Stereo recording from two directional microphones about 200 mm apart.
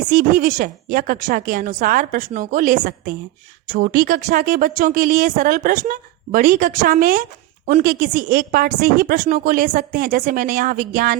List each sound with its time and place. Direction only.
0.1 s speech: 40° right (ahead or behind)